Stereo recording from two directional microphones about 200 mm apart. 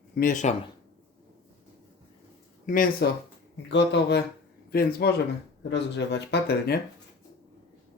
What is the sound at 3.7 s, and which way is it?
Speech, 60° left (ahead or behind).